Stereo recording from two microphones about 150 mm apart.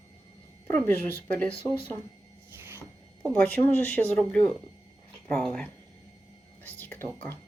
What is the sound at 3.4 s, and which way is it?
Speech, 10° left (ahead or behind).